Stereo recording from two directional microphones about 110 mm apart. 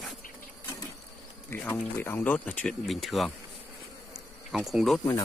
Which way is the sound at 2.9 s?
Centre (ahead or behind).